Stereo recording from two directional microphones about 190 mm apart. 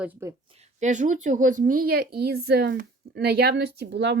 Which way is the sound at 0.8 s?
40° right (ahead or behind).